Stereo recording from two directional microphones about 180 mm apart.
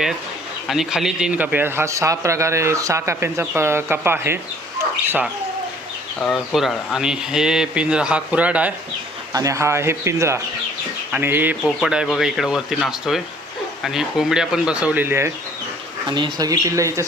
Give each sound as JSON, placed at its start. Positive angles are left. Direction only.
{"t": 0.7, "sound": "a man's voice", "side_deg": 0}
{"t": 6.1, "sound": "speech", "side_deg": 0}
{"t": 9.3, "sound": "a man's voice", "side_deg": -20}
{"t": 16.0, "sound": "speech", "side_deg": -25}